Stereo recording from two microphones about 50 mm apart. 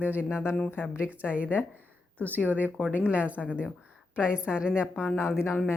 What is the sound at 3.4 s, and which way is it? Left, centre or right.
Speech, left.